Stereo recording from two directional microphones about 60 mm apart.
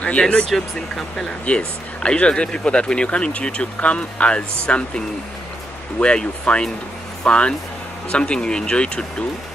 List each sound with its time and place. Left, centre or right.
0.0 s speech: centre
0.6 s speech: centre